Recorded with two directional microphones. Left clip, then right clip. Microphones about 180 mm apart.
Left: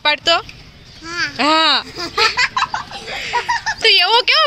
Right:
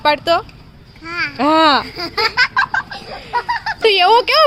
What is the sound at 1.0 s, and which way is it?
Babbling, 30° right (ahead or behind).